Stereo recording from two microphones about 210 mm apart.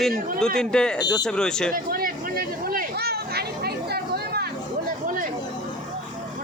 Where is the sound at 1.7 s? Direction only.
45° right (ahead or behind).